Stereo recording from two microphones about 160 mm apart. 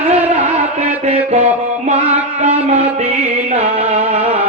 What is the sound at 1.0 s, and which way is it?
Music, 45° right (ahead or behind).